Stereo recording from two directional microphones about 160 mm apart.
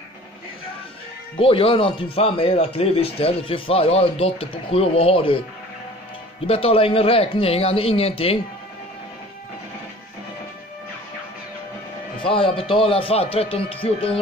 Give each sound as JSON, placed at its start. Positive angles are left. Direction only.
{"t": 1.3, "sound": "a man's voice", "side_deg": 35}
{"t": 6.4, "sound": "a man's voice", "side_deg": 35}
{"t": 12.2, "sound": "a man's voice", "side_deg": 35}